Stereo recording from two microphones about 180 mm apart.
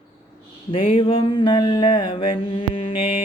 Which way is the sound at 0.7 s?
30° left (ahead or behind).